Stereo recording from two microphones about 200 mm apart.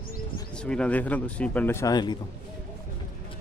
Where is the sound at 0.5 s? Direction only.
5° left (ahead or behind); by 2.1 s 20° left (ahead or behind).